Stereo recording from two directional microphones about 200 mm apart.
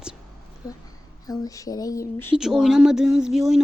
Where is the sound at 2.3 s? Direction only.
Centre (ahead or behind).